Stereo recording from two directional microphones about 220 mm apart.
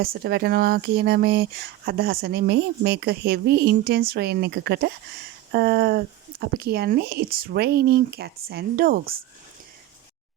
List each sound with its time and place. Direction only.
0.0 s speech: 45° right (ahead or behind)